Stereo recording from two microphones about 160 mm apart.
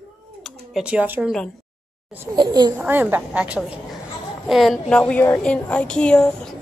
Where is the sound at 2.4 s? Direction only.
25° right (ahead or behind).